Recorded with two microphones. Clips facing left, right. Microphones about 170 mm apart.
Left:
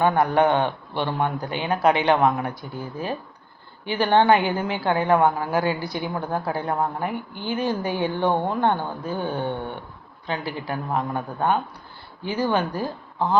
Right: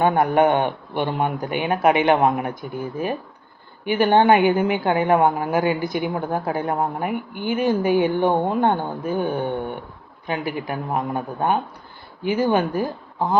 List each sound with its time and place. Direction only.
0.0 s a man's voice: 15° right (ahead or behind)
3.8 s a man's voice: 15° right (ahead or behind)